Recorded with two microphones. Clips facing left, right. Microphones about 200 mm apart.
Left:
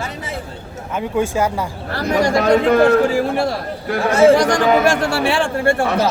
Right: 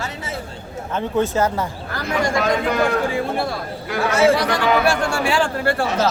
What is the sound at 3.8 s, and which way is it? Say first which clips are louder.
A man's voice: left 5 dB; 45° left (ahead or behind).